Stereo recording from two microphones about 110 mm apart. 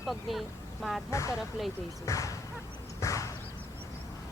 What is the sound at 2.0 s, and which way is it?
Speech, 30° left (ahead or behind).